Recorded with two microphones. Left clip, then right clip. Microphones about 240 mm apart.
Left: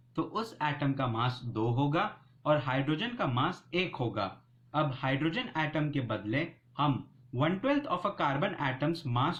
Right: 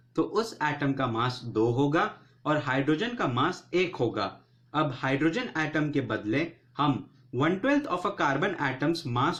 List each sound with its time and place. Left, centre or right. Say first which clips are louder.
0.2 s speech: right 6 dB; left